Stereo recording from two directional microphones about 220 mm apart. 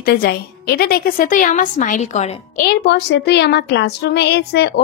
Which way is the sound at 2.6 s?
50° left (ahead or behind).